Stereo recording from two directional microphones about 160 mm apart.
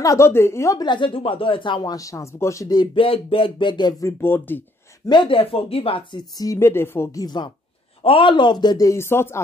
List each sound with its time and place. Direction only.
0.0 s speech: 20° left (ahead or behind)
4.2 s speech: 15° left (ahead or behind)
5.0 s speech: 30° left (ahead or behind)
6.4 s speech: 20° left (ahead or behind)